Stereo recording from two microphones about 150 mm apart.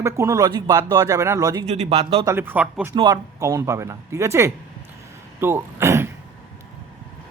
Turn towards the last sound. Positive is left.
turn(degrees=-15)  # may be behind; listen again after turning